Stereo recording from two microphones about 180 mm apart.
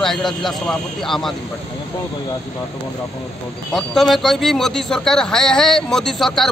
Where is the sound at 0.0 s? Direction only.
Centre (ahead or behind).